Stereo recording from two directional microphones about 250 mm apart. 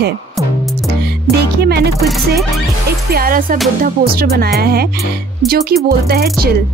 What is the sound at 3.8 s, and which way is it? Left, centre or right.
Music, right.